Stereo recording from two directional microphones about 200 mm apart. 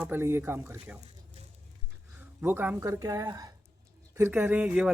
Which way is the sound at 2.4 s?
10° right (ahead or behind).